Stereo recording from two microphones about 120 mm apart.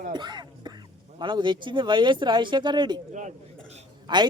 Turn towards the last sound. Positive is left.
turn(degrees=-40)  # may be behind; listen again after turning